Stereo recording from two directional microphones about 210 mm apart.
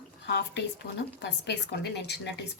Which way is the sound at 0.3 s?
55° left (ahead or behind).